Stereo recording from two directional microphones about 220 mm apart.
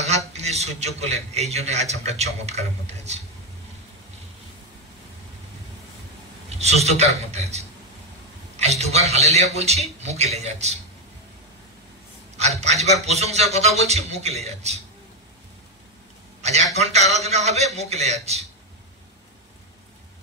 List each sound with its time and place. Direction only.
0.3 s a man's voice: 30° right (ahead or behind)
6.6 s a man's voice: 30° right (ahead or behind)
12.4 s a man's voice: 30° right (ahead or behind)
16.3 s a sound: 30° right (ahead or behind)
16.7 s a man's voice: 30° right (ahead or behind)